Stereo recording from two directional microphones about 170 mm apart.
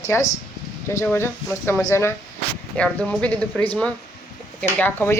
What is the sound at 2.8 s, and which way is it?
A woman's voice, 5° left (ahead or behind).